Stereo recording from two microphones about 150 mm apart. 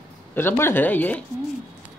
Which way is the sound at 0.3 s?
15° left (ahead or behind).